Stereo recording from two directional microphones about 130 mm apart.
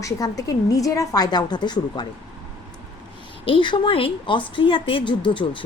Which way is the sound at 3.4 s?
40° left (ahead or behind).